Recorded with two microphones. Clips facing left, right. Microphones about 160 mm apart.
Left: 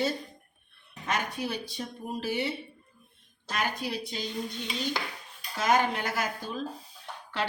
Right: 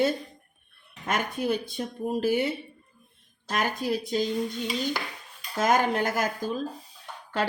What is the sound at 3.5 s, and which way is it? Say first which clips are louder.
Speech: right 5 dB; 45° right (ahead or behind).